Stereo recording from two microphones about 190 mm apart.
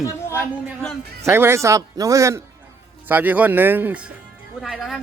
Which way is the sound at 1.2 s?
15° right (ahead or behind).